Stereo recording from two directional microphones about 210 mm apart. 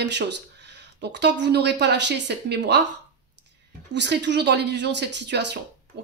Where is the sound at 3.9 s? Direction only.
55° right (ahead or behind).